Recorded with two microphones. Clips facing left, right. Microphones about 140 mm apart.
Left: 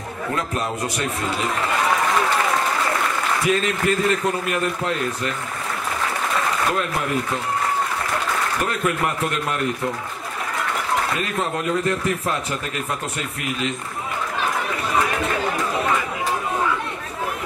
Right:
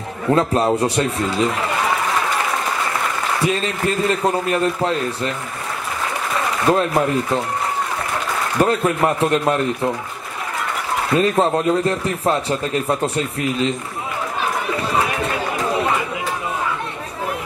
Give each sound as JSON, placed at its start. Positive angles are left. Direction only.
{"t": 0.4, "sound": "a man's voice", "side_deg": -30}
{"t": 3.4, "sound": "a man's voice", "side_deg": -30}
{"t": 6.7, "sound": "a man's voice", "side_deg": -30}
{"t": 8.5, "sound": "a man's voice", "side_deg": -30}
{"t": 11.1, "sound": "a man's voice", "side_deg": -35}